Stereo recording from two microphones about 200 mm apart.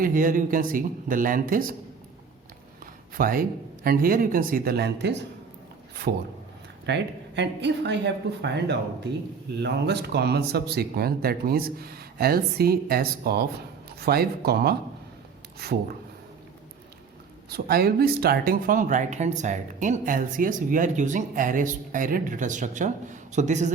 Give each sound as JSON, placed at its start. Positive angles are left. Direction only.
{"t": 0.0, "sound": "speech", "side_deg": -45}
{"t": 3.2, "sound": "speech", "side_deg": -45}
{"t": 6.8, "sound": "speech", "side_deg": -60}
{"t": 17.5, "sound": "speech", "side_deg": -50}